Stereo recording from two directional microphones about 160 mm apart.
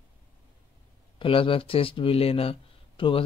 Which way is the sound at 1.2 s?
35° left (ahead or behind).